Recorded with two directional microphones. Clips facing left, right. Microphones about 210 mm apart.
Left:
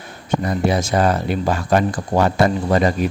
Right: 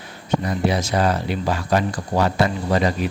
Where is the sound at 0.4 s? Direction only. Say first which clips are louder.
Left 4 dB; 50° left (ahead or behind).